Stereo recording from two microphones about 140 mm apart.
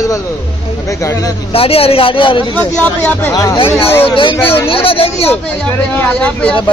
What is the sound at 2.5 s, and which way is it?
Speech, 10° left (ahead or behind).